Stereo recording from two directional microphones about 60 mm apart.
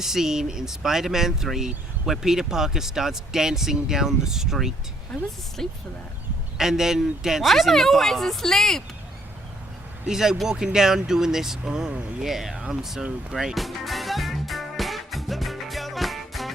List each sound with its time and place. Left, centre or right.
0.0 s speech: centre
5.6 s speech: centre
6.6 s speech: centre
10.1 s speech: centre
13.3 s music: centre